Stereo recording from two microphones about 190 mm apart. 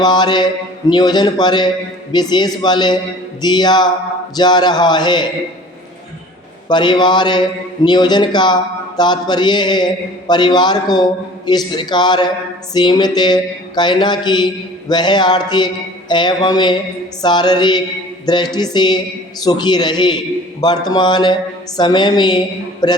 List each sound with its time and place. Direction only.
0.0 s a man's voice: 20° left (ahead or behind)
6.7 s a man's voice: 25° left (ahead or behind)